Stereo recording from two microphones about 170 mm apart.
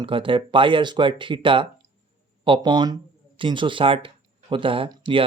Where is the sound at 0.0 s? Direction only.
30° right (ahead or behind).